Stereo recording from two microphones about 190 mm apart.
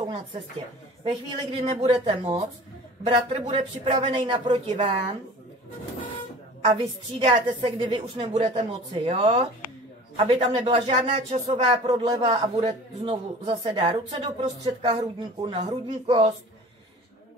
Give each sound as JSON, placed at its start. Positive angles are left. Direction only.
{"t": 0.0, "sound": "a man's voice", "side_deg": -25}
{"t": 6.6, "sound": "a man's voice", "side_deg": -30}